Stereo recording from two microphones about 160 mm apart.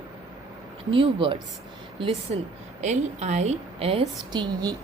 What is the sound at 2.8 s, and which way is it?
A woman's voice, 45° right (ahead or behind).